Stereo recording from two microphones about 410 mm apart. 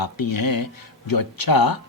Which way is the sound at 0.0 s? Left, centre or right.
Left.